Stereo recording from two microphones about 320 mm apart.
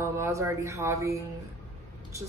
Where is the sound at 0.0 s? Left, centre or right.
Centre.